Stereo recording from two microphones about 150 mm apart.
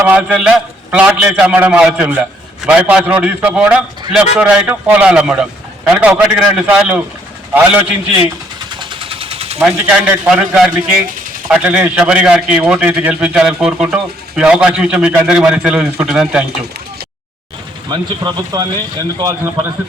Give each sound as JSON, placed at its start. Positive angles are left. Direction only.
{"t": 0.0, "sound": "a man's voice", "side_deg": -10}
{"t": 8.8, "sound": "a sound", "side_deg": -35}
{"t": 9.6, "sound": "a man's voice", "side_deg": -10}
{"t": 17.8, "sound": "speech", "side_deg": -30}